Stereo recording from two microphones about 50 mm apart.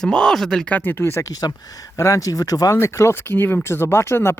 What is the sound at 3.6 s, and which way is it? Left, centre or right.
Speech, left.